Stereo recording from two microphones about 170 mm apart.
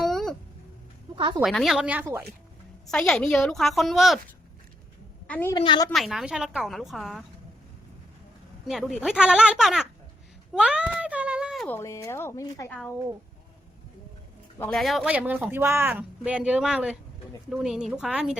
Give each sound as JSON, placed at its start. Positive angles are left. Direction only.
{"t": 0.0, "sound": "a sound", "side_deg": 0}
{"t": 1.1, "sound": "a sound", "side_deg": -25}
{"t": 1.4, "sound": "a woman's voice", "side_deg": 0}
{"t": 2.9, "sound": "a woman's voice", "side_deg": 5}
{"t": 5.3, "sound": "speech", "side_deg": 10}
{"t": 5.5, "sound": "a woman's voice", "side_deg": 30}
{"t": 5.9, "sound": "a woman's voice", "side_deg": 0}
{"t": 8.6, "sound": "a woman's voice", "side_deg": 0}
{"t": 10.5, "sound": "a sound", "side_deg": -5}
{"t": 11.6, "sound": "speech", "side_deg": 15}
{"t": 14.6, "sound": "a woman's voice", "side_deg": 0}